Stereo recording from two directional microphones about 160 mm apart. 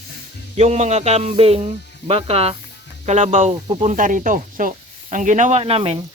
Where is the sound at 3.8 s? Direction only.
55° right (ahead or behind); by 6.0 s 35° right (ahead or behind).